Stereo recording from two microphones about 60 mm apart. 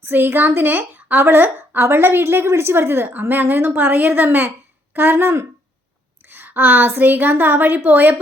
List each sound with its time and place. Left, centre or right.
0.0 s a woman's voice: right